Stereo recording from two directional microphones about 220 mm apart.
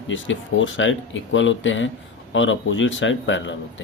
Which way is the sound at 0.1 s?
60° left (ahead or behind).